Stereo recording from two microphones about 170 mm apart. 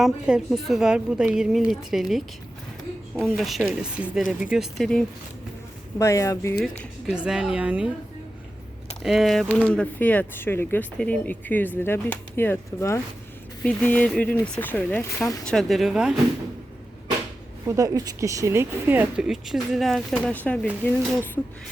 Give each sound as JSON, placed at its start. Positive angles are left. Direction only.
{"t": 0.0, "sound": "a woman's voice", "side_deg": 0}
{"t": 6.0, "sound": "speech", "side_deg": 15}
{"t": 7.3, "sound": "a woman's voice", "side_deg": -5}
{"t": 9.0, "sound": "speech", "side_deg": 0}
{"t": 15.2, "sound": "speech", "side_deg": 20}
{"t": 15.4, "sound": "a woman's voice", "side_deg": 0}
{"t": 17.7, "sound": "speech", "side_deg": -20}